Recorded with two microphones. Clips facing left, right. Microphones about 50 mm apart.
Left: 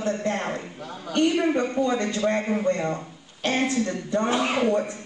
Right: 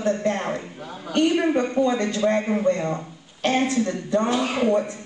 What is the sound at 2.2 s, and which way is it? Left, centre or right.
Speech, centre.